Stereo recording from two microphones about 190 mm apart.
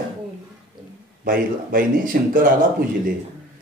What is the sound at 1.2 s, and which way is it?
Speech, 50° right (ahead or behind).